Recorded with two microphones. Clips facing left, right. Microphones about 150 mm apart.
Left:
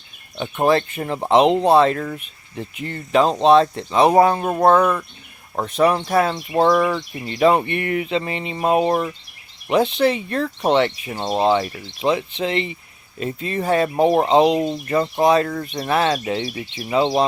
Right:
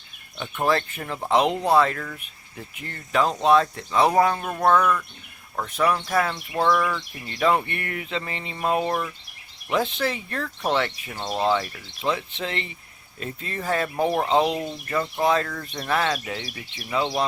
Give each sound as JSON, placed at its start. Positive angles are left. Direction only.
{"t": 0.3, "sound": "speech", "side_deg": 25}
{"t": 5.5, "sound": "speech", "side_deg": 25}